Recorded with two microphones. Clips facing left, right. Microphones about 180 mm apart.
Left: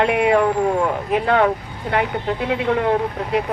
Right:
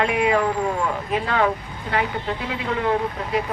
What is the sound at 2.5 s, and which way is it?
Speech, 60° left (ahead or behind).